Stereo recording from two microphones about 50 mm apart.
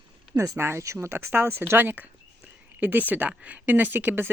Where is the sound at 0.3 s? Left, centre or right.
Right.